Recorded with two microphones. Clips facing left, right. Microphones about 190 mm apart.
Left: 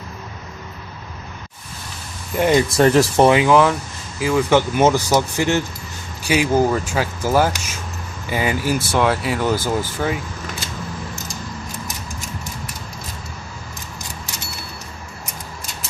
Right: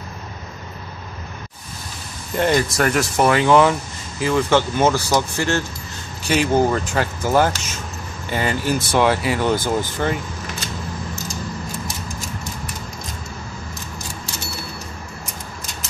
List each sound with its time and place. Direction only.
2.3 s speech: 10° left (ahead or behind)
2.7 s speech: 30° left (ahead or behind)
3.4 s speech: centre (ahead or behind)